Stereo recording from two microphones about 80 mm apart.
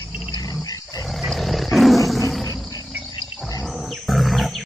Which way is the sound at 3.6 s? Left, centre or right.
Centre.